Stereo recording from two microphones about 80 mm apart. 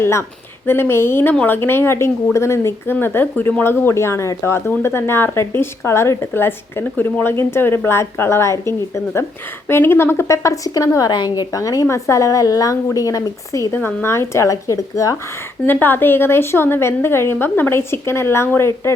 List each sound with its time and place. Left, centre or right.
0.0 s a woman's voice: left
11.1 s a woman's voice: left
11.5 s a woman's voice: left
13.7 s a woman's voice: left
15.6 s a woman's voice: left